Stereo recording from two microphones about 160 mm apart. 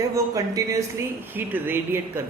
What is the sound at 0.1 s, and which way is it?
A man's voice, 20° right (ahead or behind).